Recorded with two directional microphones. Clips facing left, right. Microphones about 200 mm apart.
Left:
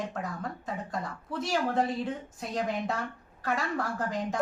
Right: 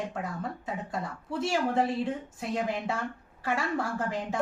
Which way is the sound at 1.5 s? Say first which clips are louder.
Even; 5° right (ahead or behind).